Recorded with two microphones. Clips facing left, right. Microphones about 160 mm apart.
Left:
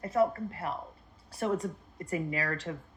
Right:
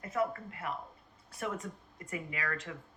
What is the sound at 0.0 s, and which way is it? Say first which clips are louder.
Speech: left 6 dB; 35° left (ahead or behind).